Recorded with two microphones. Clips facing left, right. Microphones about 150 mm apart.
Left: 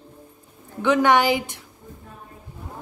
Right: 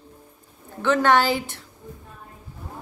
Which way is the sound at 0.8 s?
15° left (ahead or behind).